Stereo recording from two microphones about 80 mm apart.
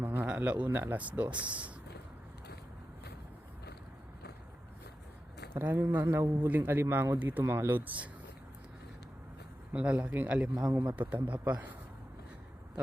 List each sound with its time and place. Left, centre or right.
0.0 s speech: right
5.5 s speech: right
7.2 s speech: right
9.7 s a man's voice: centre
10.5 s a man's voice: right
11.1 s speech: centre